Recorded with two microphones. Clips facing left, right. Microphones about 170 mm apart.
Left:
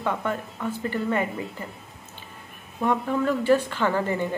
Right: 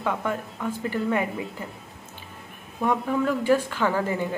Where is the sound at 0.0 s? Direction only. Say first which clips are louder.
Even; 5° right (ahead or behind).